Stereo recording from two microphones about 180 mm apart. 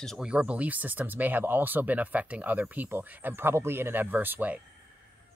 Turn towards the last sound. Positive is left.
turn(degrees=-10)  # may be behind; listen again after turning